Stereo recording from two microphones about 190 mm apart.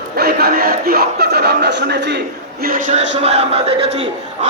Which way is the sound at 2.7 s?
45° right (ahead or behind).